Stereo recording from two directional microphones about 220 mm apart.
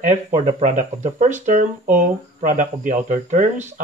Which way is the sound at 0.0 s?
35° right (ahead or behind).